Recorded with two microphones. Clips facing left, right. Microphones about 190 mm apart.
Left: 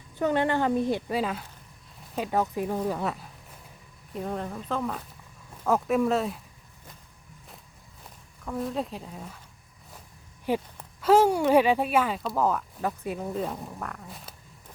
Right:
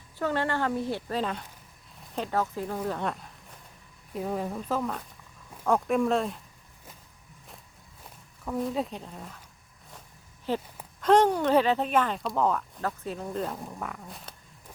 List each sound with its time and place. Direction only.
0.2 s a woman's voice: 20° left (ahead or behind)
8.4 s speech: centre (ahead or behind)
10.5 s a woman's voice: 10° left (ahead or behind)